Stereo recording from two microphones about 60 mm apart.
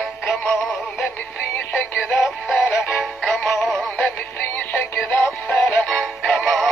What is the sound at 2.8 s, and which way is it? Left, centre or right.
Music, centre.